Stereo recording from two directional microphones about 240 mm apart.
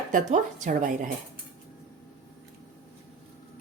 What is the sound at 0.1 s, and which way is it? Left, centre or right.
Speech, right.